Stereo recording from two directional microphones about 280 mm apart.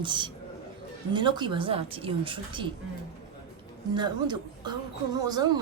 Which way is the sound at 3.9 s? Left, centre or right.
Centre.